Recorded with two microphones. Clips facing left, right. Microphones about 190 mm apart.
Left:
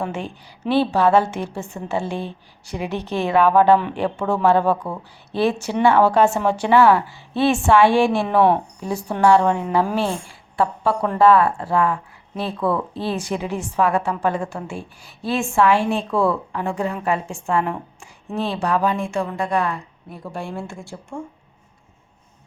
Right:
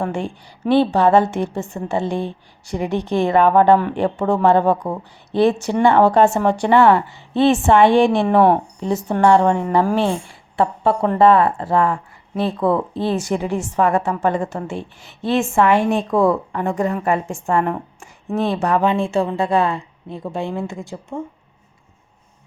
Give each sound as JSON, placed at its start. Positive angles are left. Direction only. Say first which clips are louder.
{"t": 0.0, "sound": "a woman's voice", "louder": "right 4 dB", "side_deg": -15}
{"t": 16.5, "sound": "a woman's voice", "louder": "right 4 dB", "side_deg": 0}
{"t": 18.3, "sound": "a woman's voice", "louder": "right 3 dB", "side_deg": -15}